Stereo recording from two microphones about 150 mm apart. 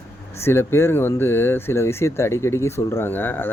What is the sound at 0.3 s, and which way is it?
Speech, 15° left (ahead or behind).